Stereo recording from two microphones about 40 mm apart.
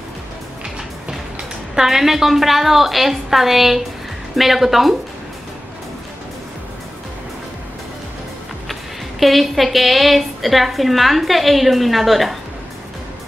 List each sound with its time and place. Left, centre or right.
1.8 s a woman's voice: centre
9.2 s a woman's voice: centre